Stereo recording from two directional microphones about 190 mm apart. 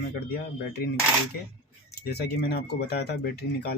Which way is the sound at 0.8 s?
55° left (ahead or behind).